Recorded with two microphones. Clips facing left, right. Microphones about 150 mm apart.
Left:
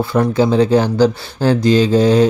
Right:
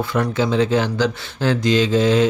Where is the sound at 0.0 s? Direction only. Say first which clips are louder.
Left 6 dB; 35° left (ahead or behind).